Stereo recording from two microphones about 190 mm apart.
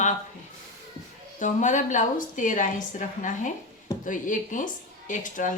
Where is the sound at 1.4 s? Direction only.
40° left (ahead or behind).